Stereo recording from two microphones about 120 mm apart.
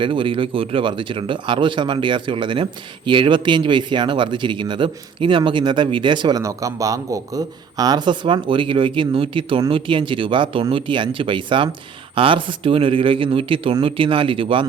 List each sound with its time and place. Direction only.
0.0 s speech: 45° right (ahead or behind)
6.4 s speech: 25° right (ahead or behind); by 14.6 s 45° right (ahead or behind)